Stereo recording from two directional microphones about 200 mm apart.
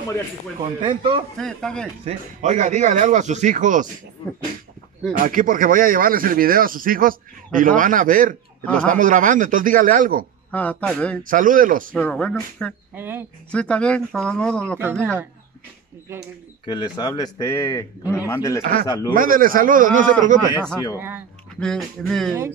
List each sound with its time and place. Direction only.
0.6 s speech: 25° right (ahead or behind)
1.4 s speech: 5° left (ahead or behind)
2.0 s speech: 35° right (ahead or behind)
5.1 s a man's voice: 45° right (ahead or behind)
10.5 s speech: 5° left (ahead or behind)
11.2 s a man's voice: 40° right (ahead or behind)
11.9 s speech: 5° left (ahead or behind)
12.9 s speech: 10° right (ahead or behind)
13.5 s speech: 5° left (ahead or behind)
14.8 s speech: 10° right (ahead or behind)
16.6 s speech: 20° left (ahead or behind)
18.6 s a man's voice: 45° right (ahead or behind)
21.5 s speech: centre (ahead or behind)